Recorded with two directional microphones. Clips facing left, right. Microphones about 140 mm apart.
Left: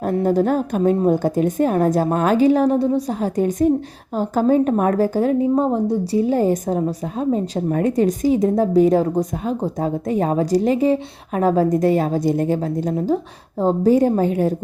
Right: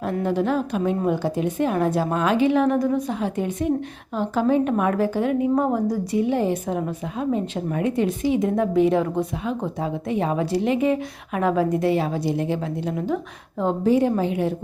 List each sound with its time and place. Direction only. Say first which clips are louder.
0.0 s a woman's voice: left 5 dB; 40° left (ahead or behind)